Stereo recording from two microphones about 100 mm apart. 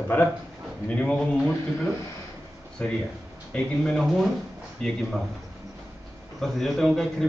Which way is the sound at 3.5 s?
10° left (ahead or behind).